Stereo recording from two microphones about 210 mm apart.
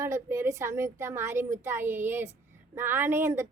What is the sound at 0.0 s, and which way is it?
Speech, 15° right (ahead or behind).